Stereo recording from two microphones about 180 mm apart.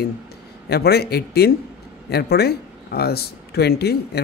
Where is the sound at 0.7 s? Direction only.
60° left (ahead or behind).